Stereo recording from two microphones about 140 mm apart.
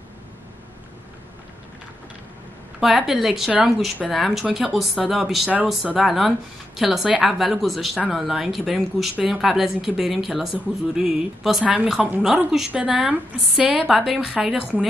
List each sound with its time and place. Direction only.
2.8 s a woman's voice: centre (ahead or behind)